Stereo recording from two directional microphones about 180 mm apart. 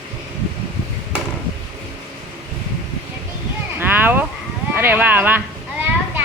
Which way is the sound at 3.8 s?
10° right (ahead or behind).